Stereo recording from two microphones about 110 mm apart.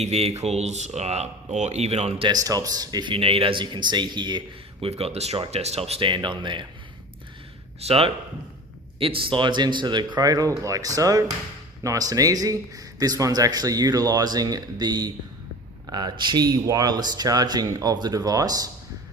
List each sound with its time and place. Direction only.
0.0 s speech: 75° right (ahead or behind)
2.2 s speech: 35° right (ahead or behind)
4.9 s speech: 65° right (ahead or behind)
6.1 s speech: 45° right (ahead or behind)
7.8 s a man's voice: 65° right (ahead or behind); by 18.7 s 35° right (ahead or behind)